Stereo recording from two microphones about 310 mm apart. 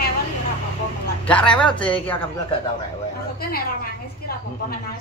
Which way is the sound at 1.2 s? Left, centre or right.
Centre.